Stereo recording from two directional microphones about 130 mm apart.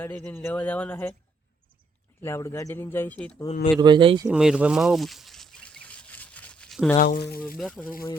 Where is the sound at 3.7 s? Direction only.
35° right (ahead or behind).